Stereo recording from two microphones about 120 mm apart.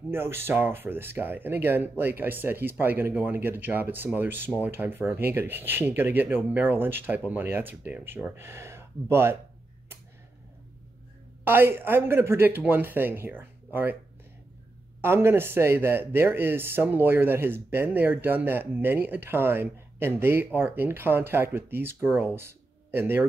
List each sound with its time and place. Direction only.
0.1 s speech: 20° right (ahead or behind)
11.4 s speech: 20° right (ahead or behind)
15.0 s speech: 20° right (ahead or behind)